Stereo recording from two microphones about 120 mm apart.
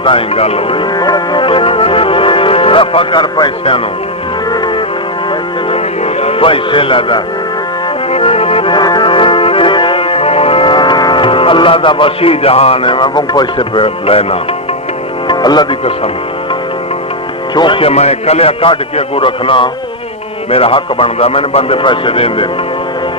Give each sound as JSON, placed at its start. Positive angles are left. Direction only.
{"t": 0.0, "sound": "a man's voice", "side_deg": 50}
{"t": 0.9, "sound": "music", "side_deg": 35}
{"t": 5.7, "sound": "a man's voice", "side_deg": 55}
{"t": 8.1, "sound": "music", "side_deg": 55}
{"t": 15.3, "sound": "music", "side_deg": 35}
{"t": 17.5, "sound": "a man's voice", "side_deg": 40}